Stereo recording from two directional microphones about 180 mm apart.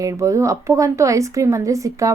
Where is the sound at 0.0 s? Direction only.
15° right (ahead or behind).